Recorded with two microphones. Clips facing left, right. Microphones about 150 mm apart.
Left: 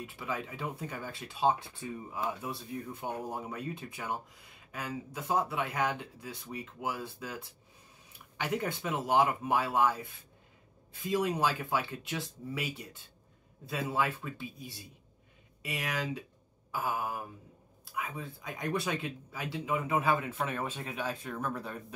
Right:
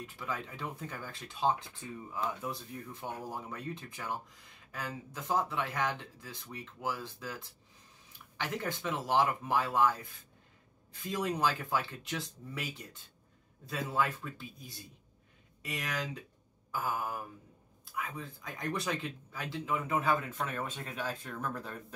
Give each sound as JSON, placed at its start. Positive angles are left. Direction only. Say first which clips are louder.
{"t": 0.0, "sound": "speech", "louder": "left 2 dB", "side_deg": 5}
{"t": 3.3, "sound": "speech", "louder": "left 3 dB", "side_deg": 20}
{"t": 3.5, "sound": "speech", "louder": "left 2 dB", "side_deg": 10}
{"t": 11.1, "sound": "speech", "louder": "left 2 dB", "side_deg": 5}